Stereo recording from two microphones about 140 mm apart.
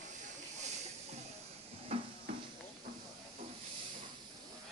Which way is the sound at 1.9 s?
45° right (ahead or behind).